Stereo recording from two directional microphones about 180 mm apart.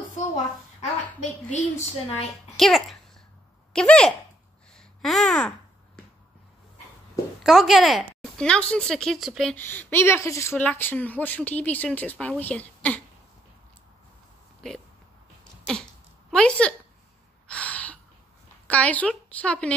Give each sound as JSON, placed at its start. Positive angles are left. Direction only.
{"t": 1.5, "sound": "a woman's voice", "side_deg": 40}
{"t": 2.5, "sound": "speech", "side_deg": 0}
{"t": 4.7, "sound": "babbling", "side_deg": 0}
{"t": 7.4, "sound": "speech", "side_deg": 0}
{"t": 15.6, "sound": "sneeze", "side_deg": 5}
{"t": 17.5, "sound": "gasp", "side_deg": 5}
{"t": 18.7, "sound": "speech", "side_deg": 10}